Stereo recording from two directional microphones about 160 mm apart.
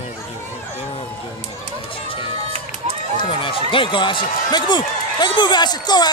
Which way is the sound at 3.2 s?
35° left (ahead or behind).